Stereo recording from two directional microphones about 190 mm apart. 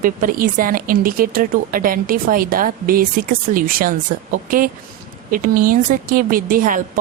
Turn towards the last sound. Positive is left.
turn(degrees=-45)  # may be behind; listen again after turning